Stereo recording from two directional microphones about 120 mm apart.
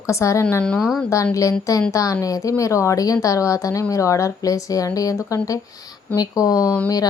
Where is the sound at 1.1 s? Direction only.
25° left (ahead or behind).